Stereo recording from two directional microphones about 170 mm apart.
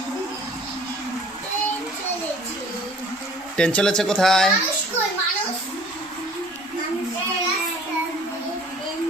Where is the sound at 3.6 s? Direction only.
5° left (ahead or behind).